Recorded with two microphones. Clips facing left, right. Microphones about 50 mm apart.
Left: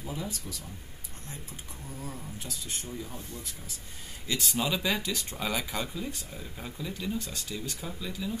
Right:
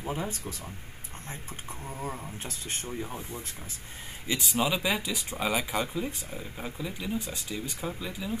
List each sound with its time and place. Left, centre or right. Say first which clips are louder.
0.0 s speech: right 4 dB; right
1.9 s speech: right 4 dB; right
3.2 s speech: right 3 dB; right